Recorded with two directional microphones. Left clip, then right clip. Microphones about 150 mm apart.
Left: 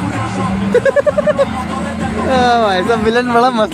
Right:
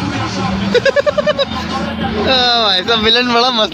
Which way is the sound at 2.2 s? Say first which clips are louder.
Left 1 dB; 10° left (ahead or behind).